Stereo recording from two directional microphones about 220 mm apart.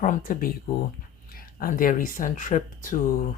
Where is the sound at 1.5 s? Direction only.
40° left (ahead or behind).